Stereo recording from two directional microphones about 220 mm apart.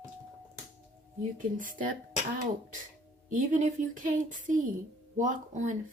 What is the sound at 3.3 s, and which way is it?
A woman's voice, 35° right (ahead or behind).